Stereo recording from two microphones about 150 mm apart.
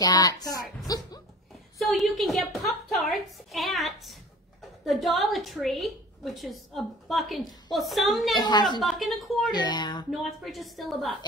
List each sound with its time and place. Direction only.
0.0 s speech: 25° left (ahead or behind)
0.8 s a sound: 25° left (ahead or behind)
1.8 s a woman's voice: centre (ahead or behind)
8.4 s speech: 30° left (ahead or behind)
8.8 s a woman's voice: centre (ahead or behind)
9.5 s speech: 30° left (ahead or behind)
10.1 s a woman's voice: centre (ahead or behind)